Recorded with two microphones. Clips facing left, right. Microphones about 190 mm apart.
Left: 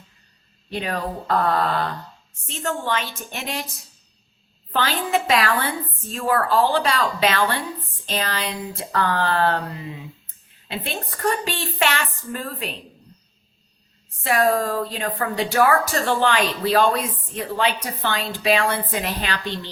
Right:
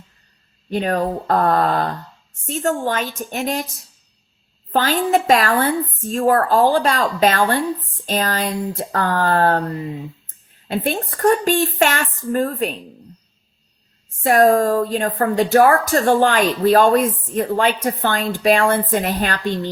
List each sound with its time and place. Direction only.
0.7 s a woman's voice: 45° right (ahead or behind)
14.3 s a woman's voice: 45° right (ahead or behind)